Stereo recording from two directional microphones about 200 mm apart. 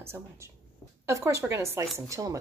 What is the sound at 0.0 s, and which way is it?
A woman's voice, 15° right (ahead or behind).